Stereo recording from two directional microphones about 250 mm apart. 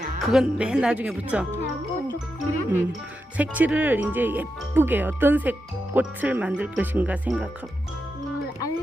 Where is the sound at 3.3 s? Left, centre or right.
Centre.